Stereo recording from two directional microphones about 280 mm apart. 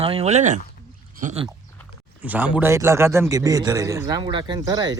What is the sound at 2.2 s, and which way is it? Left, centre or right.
A man's voice, centre.